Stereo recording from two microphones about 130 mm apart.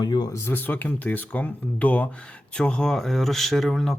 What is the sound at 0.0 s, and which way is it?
Speech, 30° left (ahead or behind).